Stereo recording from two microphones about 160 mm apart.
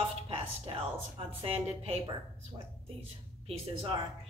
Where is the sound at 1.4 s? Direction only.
40° right (ahead or behind).